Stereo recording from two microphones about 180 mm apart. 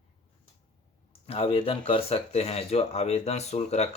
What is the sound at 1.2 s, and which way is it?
Speech, 35° left (ahead or behind).